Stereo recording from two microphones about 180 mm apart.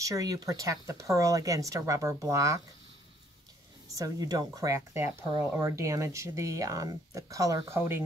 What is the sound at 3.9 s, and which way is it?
Speech, 20° right (ahead or behind).